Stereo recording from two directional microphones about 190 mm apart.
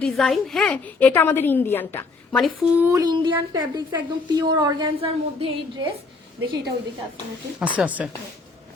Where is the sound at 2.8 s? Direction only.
15° right (ahead or behind).